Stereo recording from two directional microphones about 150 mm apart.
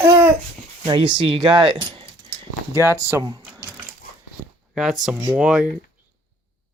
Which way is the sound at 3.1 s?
20° right (ahead or behind).